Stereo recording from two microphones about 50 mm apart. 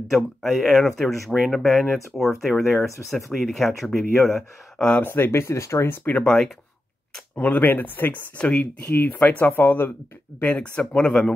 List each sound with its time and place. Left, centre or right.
0.1 s speech: centre
4.7 s speech: centre
5.0 s speech: left
6.2 s speech: centre
7.3 s speech: left
8.4 s speech: left
10.5 s speech: left
11.0 s speech: centre